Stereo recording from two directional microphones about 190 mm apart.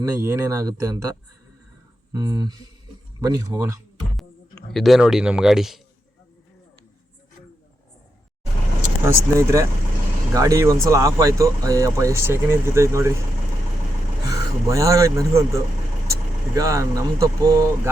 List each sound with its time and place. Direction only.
0.0 s speech: 15° right (ahead or behind)
2.1 s speech: 20° right (ahead or behind)
4.2 s speech: centre (ahead or behind)
9.0 s speech: 15° right (ahead or behind)
14.3 s speech: 15° right (ahead or behind)